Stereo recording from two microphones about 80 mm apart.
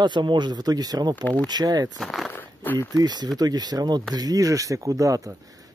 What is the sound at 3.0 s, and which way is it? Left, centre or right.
Speech, right.